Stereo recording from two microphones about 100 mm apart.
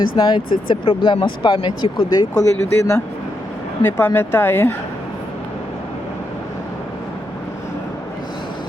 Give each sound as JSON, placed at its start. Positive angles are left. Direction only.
{"t": 0.2, "sound": "speech", "side_deg": 45}
{"t": 0.7, "sound": "speech", "side_deg": 60}
{"t": 3.8, "sound": "speech", "side_deg": 20}